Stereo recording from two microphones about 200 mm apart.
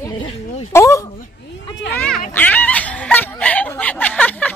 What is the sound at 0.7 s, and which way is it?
Speech, 15° left (ahead or behind).